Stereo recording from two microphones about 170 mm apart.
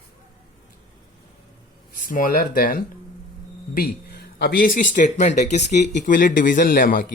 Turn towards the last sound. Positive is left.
turn(degrees=55)  # may be behind; listen again after turning